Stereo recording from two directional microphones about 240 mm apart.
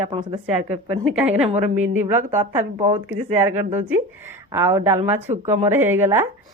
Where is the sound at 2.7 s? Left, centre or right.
Right.